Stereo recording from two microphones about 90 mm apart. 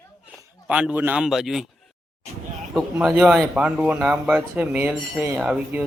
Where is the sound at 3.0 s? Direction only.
15° right (ahead or behind).